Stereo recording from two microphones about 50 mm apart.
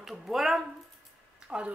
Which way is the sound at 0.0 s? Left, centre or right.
Centre.